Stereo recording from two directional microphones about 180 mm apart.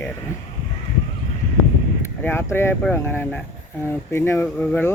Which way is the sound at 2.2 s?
10° left (ahead or behind).